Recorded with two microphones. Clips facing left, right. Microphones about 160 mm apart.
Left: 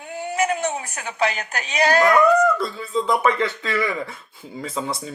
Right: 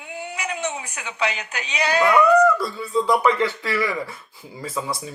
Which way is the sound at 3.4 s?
20° left (ahead or behind).